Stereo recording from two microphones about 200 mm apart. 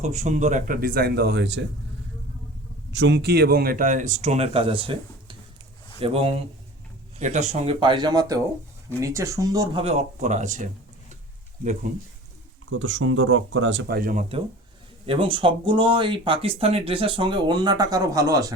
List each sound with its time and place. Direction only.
0.0 s speech: 35° right (ahead or behind); by 1.6 s 55° right (ahead or behind)
2.9 s speech: 60° right (ahead or behind); by 9.8 s 15° right (ahead or behind)
9.8 s speech: 35° right (ahead or behind)
12.8 s speech: 70° right (ahead or behind); by 14.3 s 45° right (ahead or behind)
15.0 s speech: 25° right (ahead or behind)